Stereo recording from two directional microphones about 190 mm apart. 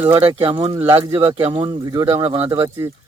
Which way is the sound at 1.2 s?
25° right (ahead or behind).